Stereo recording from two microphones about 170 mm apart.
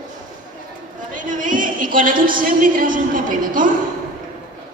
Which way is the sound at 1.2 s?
50° right (ahead or behind).